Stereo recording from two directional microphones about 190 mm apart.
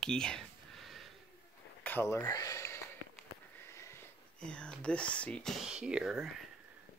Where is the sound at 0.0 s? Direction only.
5° left (ahead or behind).